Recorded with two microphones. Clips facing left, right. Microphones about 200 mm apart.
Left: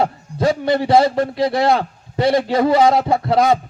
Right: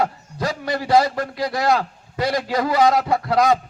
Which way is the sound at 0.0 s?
25° left (ahead or behind).